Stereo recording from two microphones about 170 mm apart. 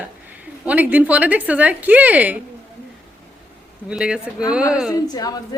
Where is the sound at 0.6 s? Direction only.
10° right (ahead or behind).